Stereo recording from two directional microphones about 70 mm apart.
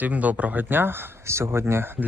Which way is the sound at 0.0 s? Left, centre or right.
Right.